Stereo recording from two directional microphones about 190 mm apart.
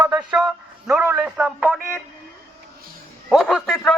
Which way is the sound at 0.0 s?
20° right (ahead or behind).